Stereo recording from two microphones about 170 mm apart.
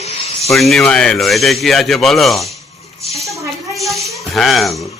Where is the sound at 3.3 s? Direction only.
20° right (ahead or behind).